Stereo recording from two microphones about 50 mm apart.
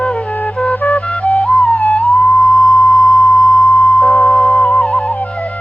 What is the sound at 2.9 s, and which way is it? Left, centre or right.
Sine wave, centre.